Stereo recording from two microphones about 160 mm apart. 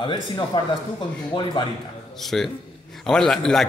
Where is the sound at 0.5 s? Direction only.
30° left (ahead or behind).